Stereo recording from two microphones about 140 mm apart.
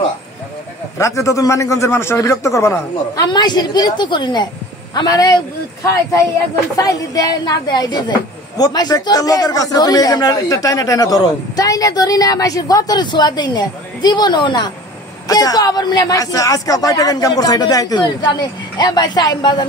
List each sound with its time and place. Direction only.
0.9 s a man's voice: 20° left (ahead or behind)